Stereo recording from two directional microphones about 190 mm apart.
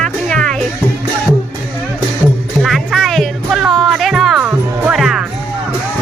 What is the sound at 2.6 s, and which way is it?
Music, centre (ahead or behind).